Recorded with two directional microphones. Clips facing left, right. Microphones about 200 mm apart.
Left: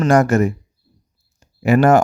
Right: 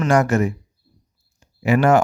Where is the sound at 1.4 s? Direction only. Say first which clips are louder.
Left 3 dB; 40° left (ahead or behind).